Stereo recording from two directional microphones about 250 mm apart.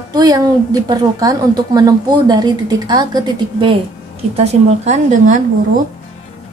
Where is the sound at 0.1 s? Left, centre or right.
Centre.